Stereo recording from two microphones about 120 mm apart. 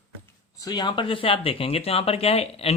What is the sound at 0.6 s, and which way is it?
Speech, 35° left (ahead or behind).